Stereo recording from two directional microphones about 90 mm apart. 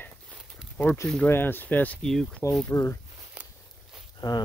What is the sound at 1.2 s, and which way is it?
Speech, 25° left (ahead or behind).